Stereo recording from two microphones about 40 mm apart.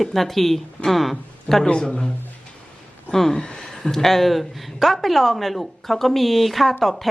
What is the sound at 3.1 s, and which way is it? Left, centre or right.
Speech, centre.